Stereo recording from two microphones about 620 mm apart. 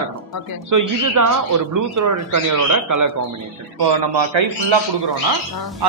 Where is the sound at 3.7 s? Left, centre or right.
Right.